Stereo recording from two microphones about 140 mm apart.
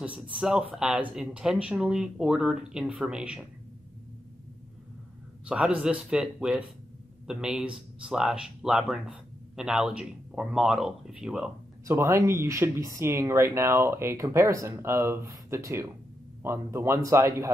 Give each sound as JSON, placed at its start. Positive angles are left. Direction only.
{"t": 0.0, "sound": "speech", "side_deg": -10}
{"t": 5.5, "sound": "speech", "side_deg": -10}
{"t": 11.8, "sound": "speech", "side_deg": -15}